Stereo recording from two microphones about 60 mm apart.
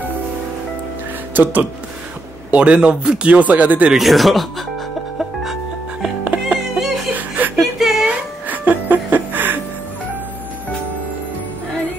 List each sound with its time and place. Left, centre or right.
1.3 s speech: right
2.5 s speech: centre
3.9 s speech: centre
6.0 s music: centre
7.2 s chuckle: right
7.5 s whimper: centre
8.1 s music: right